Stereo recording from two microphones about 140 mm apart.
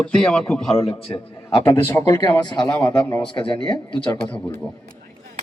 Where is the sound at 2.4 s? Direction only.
30° left (ahead or behind).